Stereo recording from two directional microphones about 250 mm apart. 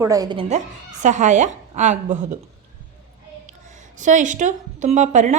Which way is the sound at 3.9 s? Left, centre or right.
Right.